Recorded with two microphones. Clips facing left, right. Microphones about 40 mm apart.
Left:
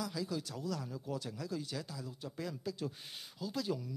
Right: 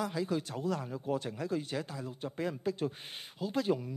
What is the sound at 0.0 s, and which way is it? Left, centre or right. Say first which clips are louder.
A man's voice: right 5 dB; right.